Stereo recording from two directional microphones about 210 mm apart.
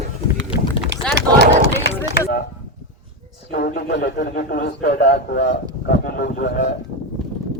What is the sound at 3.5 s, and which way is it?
A man's voice, 50° left (ahead or behind).